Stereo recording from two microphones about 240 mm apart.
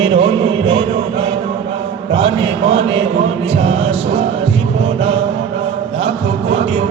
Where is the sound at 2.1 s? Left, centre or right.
Centre.